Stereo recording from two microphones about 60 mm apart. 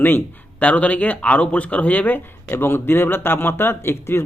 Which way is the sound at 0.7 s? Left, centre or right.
Left.